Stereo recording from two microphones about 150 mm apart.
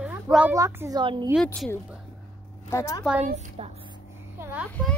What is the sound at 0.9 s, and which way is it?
Speech, 30° right (ahead or behind).